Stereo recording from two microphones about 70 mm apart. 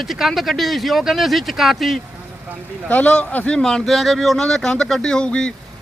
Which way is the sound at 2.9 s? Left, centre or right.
Left.